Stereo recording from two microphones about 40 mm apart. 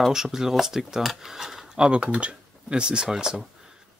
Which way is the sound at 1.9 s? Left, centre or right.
Right.